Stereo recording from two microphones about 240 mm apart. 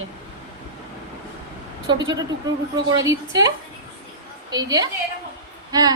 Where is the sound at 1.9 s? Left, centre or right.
Centre.